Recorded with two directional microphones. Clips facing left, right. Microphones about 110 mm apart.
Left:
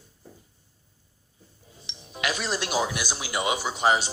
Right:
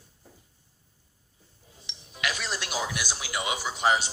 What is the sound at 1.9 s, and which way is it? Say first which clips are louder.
Speech: left 3 dB; 30° left (ahead or behind).